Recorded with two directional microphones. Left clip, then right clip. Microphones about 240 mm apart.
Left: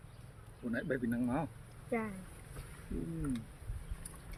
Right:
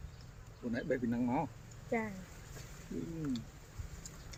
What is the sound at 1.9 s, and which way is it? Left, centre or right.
Speech, centre.